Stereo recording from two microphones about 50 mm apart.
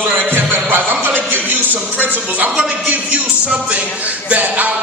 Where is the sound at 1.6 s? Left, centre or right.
Right.